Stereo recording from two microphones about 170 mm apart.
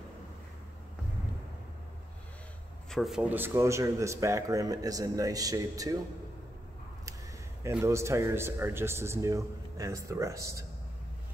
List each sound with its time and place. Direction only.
2.9 s speech: centre (ahead or behind); by 5.9 s 20° right (ahead or behind)
7.6 s speech: 15° right (ahead or behind)